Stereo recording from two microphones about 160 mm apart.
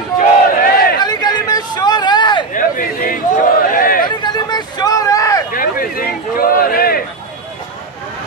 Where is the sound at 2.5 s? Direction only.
60° left (ahead or behind).